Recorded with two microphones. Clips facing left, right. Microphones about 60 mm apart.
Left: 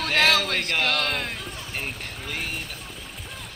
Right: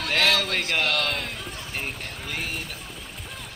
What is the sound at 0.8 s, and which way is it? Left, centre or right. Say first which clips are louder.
Speech: left 1 dB; left.